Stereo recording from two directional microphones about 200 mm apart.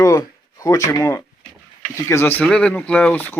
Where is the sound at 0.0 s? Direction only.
15° left (ahead or behind).